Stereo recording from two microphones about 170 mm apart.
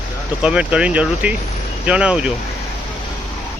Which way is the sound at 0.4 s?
5° right (ahead or behind).